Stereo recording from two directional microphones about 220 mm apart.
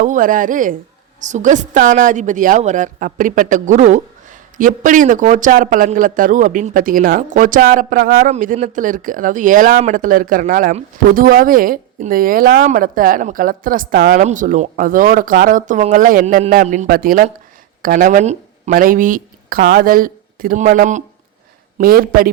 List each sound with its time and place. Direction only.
0.0 s a woman's voice: 35° right (ahead or behind)